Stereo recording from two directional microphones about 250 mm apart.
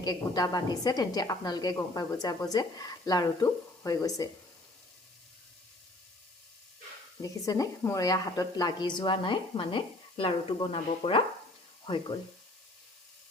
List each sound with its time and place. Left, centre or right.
0.0 s a woman's voice: centre
7.2 s a woman's voice: centre